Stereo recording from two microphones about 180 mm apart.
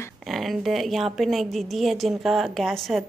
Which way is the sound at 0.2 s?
Centre (ahead or behind).